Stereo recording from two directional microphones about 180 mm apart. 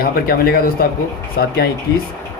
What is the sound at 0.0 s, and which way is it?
Speech, 55° left (ahead or behind).